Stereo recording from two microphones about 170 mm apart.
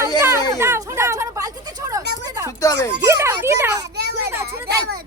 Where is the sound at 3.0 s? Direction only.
15° right (ahead or behind).